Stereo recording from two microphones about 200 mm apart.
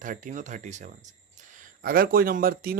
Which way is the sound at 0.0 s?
40° right (ahead or behind).